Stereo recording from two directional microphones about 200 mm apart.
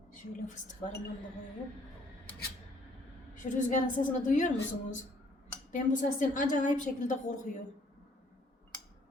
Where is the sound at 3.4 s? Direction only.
40° left (ahead or behind).